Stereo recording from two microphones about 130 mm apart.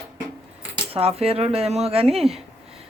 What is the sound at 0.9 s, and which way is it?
Speech, 50° right (ahead or behind).